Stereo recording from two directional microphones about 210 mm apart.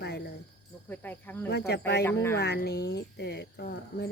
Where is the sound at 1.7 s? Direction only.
50° left (ahead or behind).